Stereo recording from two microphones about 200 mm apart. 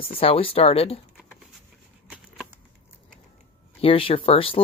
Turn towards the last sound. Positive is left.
turn(degrees=30)  # may be behind; listen again after turning